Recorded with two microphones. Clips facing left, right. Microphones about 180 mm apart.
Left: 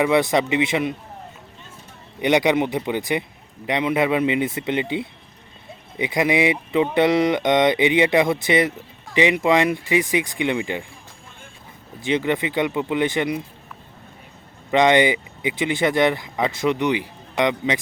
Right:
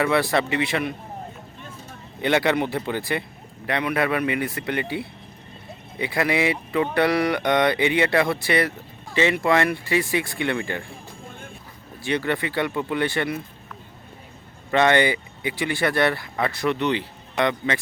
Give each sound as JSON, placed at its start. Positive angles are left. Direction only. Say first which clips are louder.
{"t": 0.0, "sound": "speech", "louder": "left 3 dB", "side_deg": 20}
{"t": 2.2, "sound": "speech", "louder": "left 3 dB", "side_deg": 15}
{"t": 11.9, "sound": "speech", "louder": "left 3 dB", "side_deg": 20}
{"t": 14.7, "sound": "speech", "louder": "left 3 dB", "side_deg": 15}